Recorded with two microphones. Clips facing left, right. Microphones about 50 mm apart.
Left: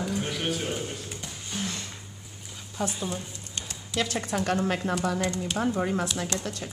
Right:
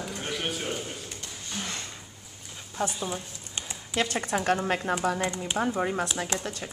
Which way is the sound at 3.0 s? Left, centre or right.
Centre.